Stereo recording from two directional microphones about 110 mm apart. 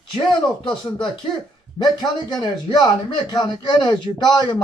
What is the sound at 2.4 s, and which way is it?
Speech, 45° left (ahead or behind).